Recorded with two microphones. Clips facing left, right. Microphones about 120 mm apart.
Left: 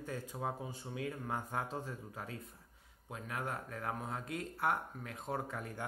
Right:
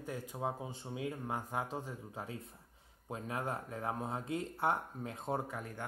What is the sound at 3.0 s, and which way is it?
Speech, 30° right (ahead or behind).